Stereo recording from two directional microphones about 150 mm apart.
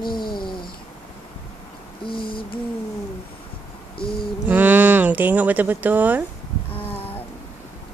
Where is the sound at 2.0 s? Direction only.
35° left (ahead or behind).